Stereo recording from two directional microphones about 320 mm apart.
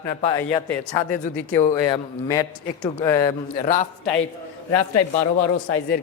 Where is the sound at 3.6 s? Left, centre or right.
Left.